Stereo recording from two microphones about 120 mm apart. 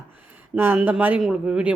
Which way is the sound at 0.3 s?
15° right (ahead or behind).